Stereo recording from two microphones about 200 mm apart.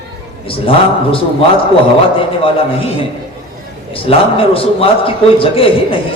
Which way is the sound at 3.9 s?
25° left (ahead or behind).